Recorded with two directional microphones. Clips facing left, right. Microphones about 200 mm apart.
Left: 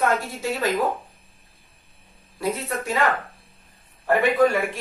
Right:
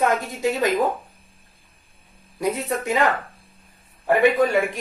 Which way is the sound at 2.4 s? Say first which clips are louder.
Right 2 dB; 20° right (ahead or behind).